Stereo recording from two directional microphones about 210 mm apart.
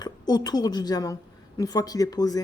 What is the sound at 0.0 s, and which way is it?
A woman's voice, 20° left (ahead or behind).